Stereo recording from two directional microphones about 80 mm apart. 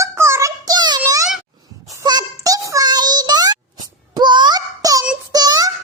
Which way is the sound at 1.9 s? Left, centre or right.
Right.